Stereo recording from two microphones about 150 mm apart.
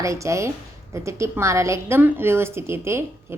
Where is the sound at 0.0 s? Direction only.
20° right (ahead or behind).